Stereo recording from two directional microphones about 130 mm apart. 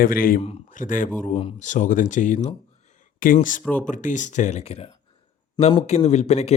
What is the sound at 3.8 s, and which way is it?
Speech, 75° left (ahead or behind).